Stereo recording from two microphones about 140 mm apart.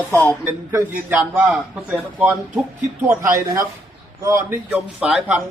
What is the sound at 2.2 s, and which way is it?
A man's voice, 15° right (ahead or behind).